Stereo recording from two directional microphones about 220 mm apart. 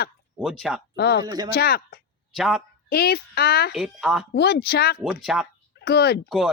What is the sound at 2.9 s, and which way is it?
Speech, 45° left (ahead or behind).